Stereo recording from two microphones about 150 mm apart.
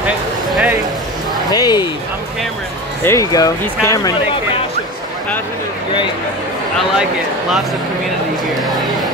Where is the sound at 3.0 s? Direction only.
20° left (ahead or behind).